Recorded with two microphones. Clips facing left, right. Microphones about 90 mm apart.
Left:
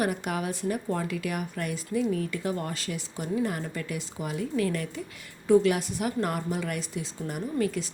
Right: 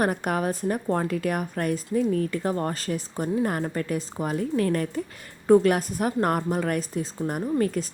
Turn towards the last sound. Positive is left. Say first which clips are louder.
# right 4 dB
turn(degrees=-45)  # may be behind; listen again after turning